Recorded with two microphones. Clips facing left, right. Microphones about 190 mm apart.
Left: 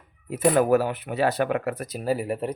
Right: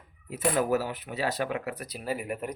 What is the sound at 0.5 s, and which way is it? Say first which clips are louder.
Speech: left 6 dB; 60° left (ahead or behind).